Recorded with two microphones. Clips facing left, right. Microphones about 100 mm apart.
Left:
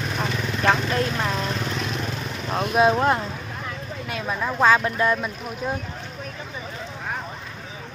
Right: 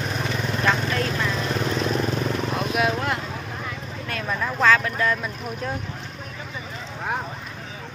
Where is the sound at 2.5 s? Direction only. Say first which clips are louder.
Left 8 dB; 30° left (ahead or behind).